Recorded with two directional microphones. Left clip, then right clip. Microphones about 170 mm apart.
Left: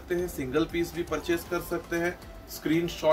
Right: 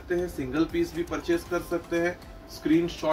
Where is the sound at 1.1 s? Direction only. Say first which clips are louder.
Even; 15° left (ahead or behind).